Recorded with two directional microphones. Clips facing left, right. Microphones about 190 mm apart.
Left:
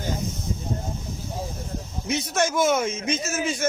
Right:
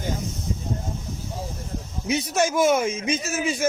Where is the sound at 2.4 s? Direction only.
10° right (ahead or behind).